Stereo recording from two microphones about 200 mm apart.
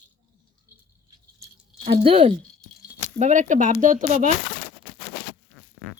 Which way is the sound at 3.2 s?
35° right (ahead or behind).